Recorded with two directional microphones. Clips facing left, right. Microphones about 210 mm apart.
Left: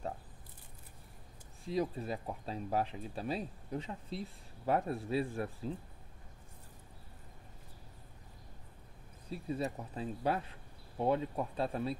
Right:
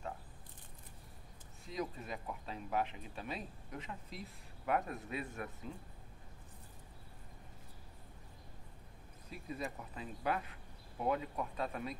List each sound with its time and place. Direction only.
1.7 s speech: 35° left (ahead or behind)
9.3 s speech: 30° left (ahead or behind)